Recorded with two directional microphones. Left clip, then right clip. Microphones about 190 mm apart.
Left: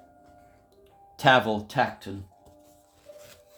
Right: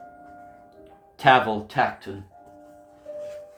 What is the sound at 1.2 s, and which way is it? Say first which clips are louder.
Speech: right 3 dB; 70° left (ahead or behind).